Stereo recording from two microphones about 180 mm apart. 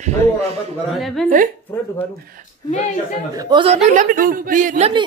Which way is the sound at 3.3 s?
25° right (ahead or behind).